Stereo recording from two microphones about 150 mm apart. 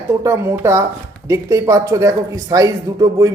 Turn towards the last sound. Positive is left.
turn(degrees=-25)  # may be behind; listen again after turning